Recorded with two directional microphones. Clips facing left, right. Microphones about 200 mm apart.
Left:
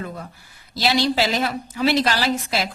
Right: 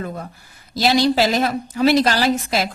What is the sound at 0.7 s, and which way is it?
A woman's voice, 45° right (ahead or behind).